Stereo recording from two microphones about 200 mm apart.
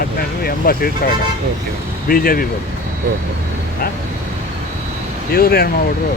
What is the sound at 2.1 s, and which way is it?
Speech, 45° left (ahead or behind).